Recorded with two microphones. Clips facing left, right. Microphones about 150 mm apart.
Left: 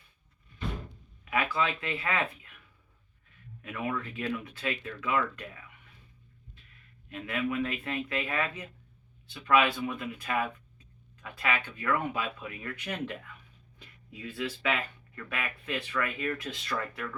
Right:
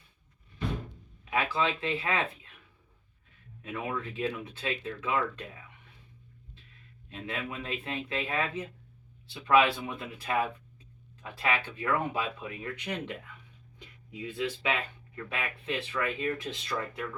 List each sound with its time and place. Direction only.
1.2 s speech: 25° right (ahead or behind)
3.6 s speech: 25° right (ahead or behind)
7.1 s speech: 25° right (ahead or behind)